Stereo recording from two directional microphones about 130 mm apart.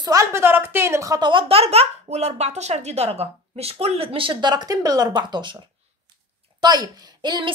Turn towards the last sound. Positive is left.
turn(degrees=-35)  # may be behind; listen again after turning